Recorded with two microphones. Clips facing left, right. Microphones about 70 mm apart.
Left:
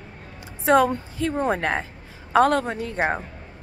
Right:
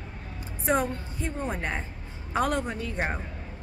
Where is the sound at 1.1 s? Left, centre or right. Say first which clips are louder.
Left 9 dB; left.